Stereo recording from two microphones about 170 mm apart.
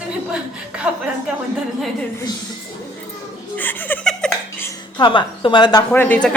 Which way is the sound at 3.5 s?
10° left (ahead or behind).